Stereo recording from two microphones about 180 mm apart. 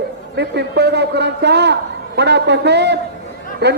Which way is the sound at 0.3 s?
70° right (ahead or behind).